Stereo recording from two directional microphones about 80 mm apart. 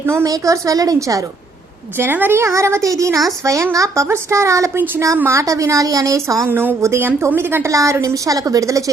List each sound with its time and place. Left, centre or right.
0.0 s a woman's voice: right
0.3 s a woman's voice: right
2.0 s a woman's voice: right
6.5 s a woman's voice: right
7.7 s a woman's voice: right